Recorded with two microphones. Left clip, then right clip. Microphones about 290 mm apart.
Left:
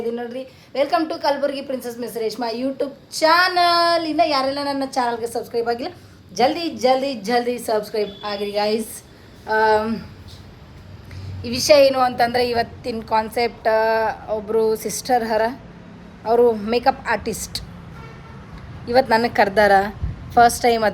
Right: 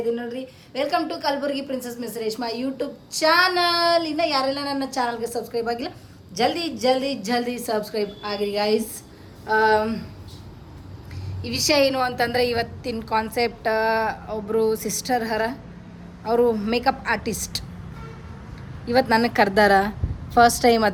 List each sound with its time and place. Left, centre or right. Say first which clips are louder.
0.1 s a woman's voice: even; centre
11.4 s a woman's voice: left 6 dB; centre
18.9 s a woman's voice: left 3 dB; centre